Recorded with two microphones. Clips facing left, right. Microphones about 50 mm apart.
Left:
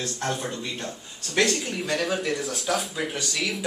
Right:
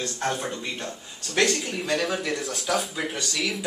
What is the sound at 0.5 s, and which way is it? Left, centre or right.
Speech, centre.